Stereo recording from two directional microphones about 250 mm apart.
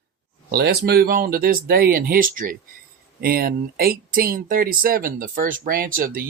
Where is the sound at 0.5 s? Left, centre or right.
Right.